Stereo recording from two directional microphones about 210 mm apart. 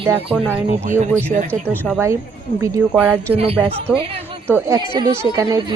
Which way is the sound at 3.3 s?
30° right (ahead or behind).